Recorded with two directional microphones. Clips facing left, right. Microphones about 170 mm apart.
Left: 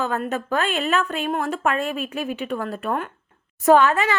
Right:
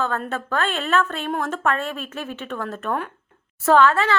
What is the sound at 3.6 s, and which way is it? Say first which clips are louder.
Speech: left 1 dB; 15° left (ahead or behind).